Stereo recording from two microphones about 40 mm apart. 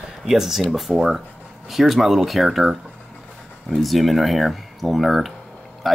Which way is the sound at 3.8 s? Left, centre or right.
Centre.